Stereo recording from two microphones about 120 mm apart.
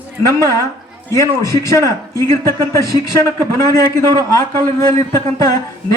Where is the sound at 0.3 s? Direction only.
25° left (ahead or behind).